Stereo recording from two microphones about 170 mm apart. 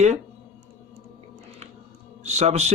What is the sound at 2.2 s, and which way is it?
Speech, 40° right (ahead or behind).